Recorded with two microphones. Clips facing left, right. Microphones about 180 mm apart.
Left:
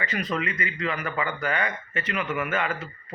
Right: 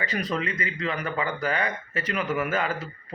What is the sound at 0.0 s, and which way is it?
Speech, 35° right (ahead or behind).